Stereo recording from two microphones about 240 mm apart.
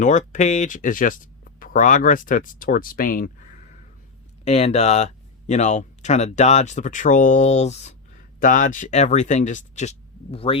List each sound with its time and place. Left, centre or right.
0.0 s speech: left